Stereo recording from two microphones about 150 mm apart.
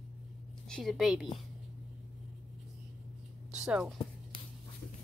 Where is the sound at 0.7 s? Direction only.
5° left (ahead or behind).